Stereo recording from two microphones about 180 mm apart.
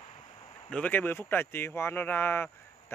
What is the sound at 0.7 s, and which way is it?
Speech, 10° left (ahead or behind).